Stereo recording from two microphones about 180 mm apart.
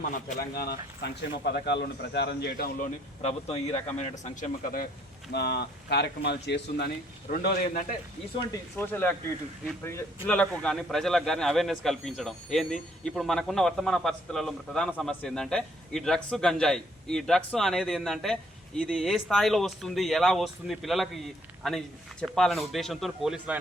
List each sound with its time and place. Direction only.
0.1 s speech: 55° left (ahead or behind)
3.2 s speech: 35° left (ahead or behind)
5.3 s speech: 65° left (ahead or behind)
7.4 s a man's voice: 50° left (ahead or behind)
8.7 s speech: 10° left (ahead or behind)
10.2 s a man's voice: 5° left (ahead or behind)